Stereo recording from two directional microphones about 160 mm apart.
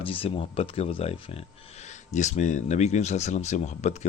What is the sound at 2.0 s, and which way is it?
A man's voice, 50° left (ahead or behind).